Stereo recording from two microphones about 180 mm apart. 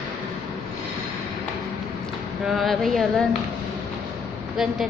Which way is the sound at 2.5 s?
Centre (ahead or behind).